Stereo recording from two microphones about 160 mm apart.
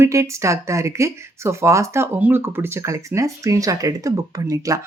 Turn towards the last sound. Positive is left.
turn(degrees=-20)  # may be behind; listen again after turning